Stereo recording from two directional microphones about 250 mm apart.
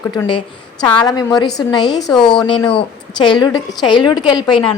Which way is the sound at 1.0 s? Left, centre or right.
Centre.